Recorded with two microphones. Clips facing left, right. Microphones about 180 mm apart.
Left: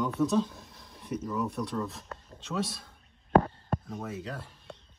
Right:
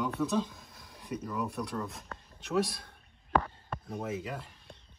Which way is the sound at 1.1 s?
15° right (ahead or behind).